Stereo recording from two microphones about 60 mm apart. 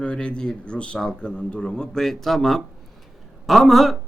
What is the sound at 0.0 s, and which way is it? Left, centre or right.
A man's voice, centre.